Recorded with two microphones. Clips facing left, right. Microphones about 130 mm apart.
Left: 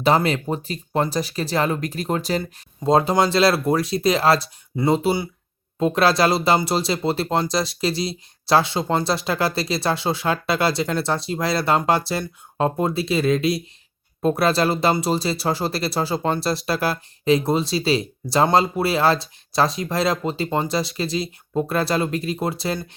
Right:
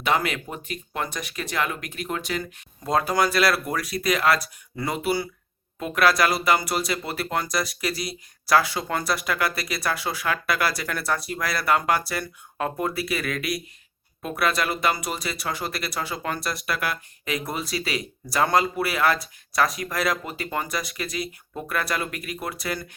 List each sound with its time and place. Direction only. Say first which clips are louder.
0.0 s speech: left 6 dB; 30° left (ahead or behind)